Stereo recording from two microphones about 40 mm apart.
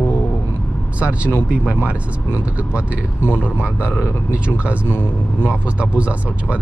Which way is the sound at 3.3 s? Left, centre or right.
Left.